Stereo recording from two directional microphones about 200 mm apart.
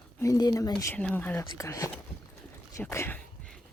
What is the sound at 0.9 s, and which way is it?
Speech, 5° left (ahead or behind).